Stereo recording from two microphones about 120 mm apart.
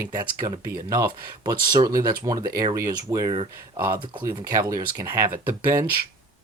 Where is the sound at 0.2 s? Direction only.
35° right (ahead or behind).